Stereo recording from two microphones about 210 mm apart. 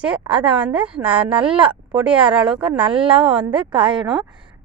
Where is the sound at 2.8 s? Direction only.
25° right (ahead or behind).